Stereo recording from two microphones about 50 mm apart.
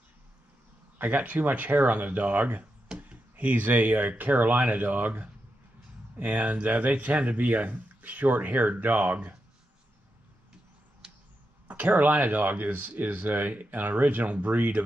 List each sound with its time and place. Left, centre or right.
0.9 s speech: right
11.6 s speech: right